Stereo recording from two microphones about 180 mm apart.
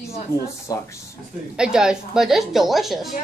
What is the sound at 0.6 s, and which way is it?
Speech, 15° left (ahead or behind).